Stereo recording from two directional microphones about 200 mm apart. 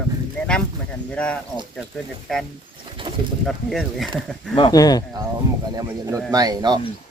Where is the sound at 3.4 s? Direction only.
Centre (ahead or behind).